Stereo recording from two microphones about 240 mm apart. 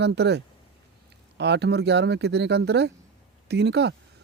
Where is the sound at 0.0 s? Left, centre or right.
Right.